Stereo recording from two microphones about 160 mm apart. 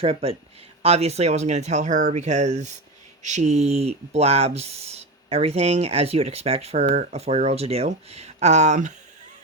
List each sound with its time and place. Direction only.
0.0 s speech: 35° right (ahead or behind)